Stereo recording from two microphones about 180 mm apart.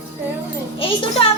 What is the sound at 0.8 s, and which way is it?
Speech, 30° left (ahead or behind).